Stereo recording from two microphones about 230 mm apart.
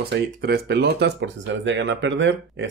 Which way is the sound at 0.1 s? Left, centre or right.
Right.